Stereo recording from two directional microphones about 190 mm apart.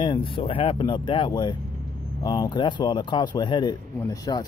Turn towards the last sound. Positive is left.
turn(degrees=20)  # may be behind; listen again after turning